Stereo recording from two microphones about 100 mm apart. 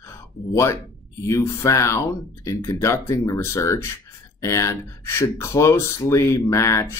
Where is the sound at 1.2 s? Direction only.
30° left (ahead or behind).